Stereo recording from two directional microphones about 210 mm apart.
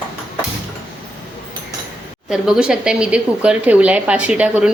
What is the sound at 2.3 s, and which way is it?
A woman's voice, 5° right (ahead or behind).